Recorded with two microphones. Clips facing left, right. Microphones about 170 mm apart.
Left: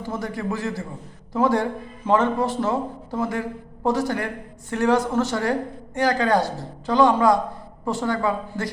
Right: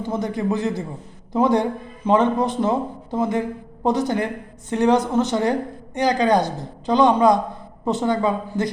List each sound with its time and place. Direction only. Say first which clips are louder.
0.0 s a woman's voice: right 4 dB; 20° right (ahead or behind)